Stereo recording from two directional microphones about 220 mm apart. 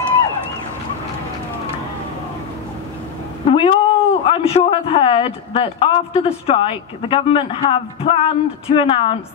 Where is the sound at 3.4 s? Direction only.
25° left (ahead or behind).